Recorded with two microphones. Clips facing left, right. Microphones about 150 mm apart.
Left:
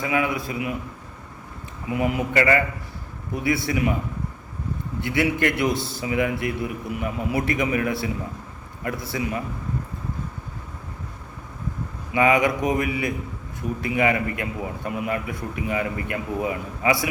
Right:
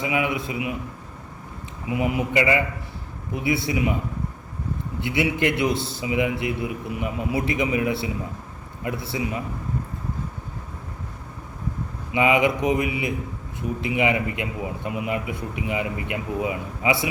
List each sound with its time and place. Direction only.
0.0 s a man's voice: 20° right (ahead or behind)
1.9 s a man's voice: 10° right (ahead or behind)
3.7 s a man's voice: 15° right (ahead or behind)
5.0 s a man's voice: 20° right (ahead or behind)
12.1 s a man's voice: 20° right (ahead or behind)